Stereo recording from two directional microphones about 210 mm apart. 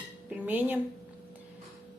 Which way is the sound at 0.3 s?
10° right (ahead or behind).